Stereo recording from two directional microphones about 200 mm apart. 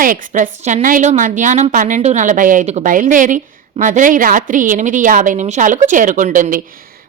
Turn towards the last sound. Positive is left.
turn(degrees=-40)  # may be behind; listen again after turning